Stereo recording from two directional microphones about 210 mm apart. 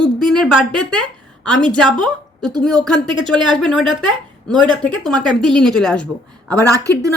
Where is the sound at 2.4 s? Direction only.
20° right (ahead or behind).